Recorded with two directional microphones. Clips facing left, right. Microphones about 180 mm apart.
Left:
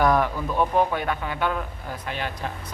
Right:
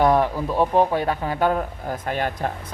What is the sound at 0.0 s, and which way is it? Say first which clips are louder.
Speech: right 3 dB; 30° right (ahead or behind).